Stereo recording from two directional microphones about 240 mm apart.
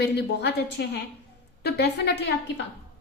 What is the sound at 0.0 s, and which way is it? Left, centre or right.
A woman's voice, left.